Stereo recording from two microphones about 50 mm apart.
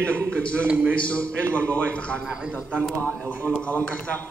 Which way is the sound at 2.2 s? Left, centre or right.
Centre.